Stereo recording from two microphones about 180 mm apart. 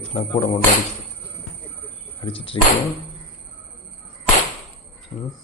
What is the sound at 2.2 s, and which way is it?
Speech, 30° left (ahead or behind).